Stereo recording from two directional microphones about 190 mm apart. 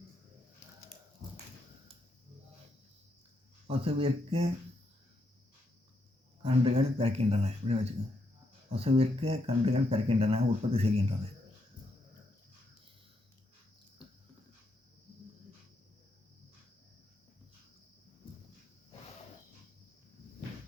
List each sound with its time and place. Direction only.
3.7 s speech: 30° right (ahead or behind)
6.4 s speech: 30° right (ahead or behind)